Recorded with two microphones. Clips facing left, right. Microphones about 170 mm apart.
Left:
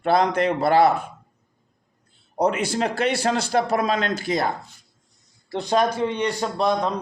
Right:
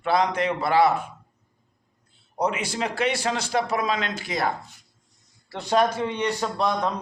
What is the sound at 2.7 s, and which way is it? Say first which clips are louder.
A man's voice: left 3 dB; 55° left (ahead or behind).